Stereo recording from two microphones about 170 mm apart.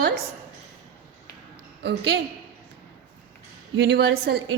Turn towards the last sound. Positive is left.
turn(degrees=-70)  # may be behind; listen again after turning